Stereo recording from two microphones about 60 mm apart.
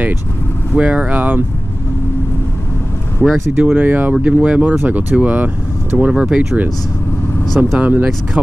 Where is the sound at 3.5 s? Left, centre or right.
Right.